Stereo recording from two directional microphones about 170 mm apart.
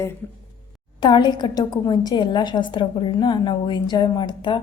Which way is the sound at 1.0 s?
25° left (ahead or behind).